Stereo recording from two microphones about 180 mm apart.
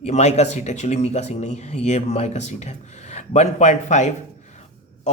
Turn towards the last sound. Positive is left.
turn(degrees=40)  # may be behind; listen again after turning